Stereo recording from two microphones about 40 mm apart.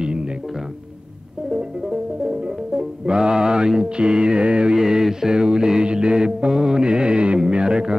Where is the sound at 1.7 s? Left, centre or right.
Centre.